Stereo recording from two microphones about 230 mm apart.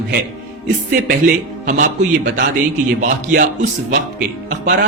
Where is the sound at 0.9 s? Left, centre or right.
Right.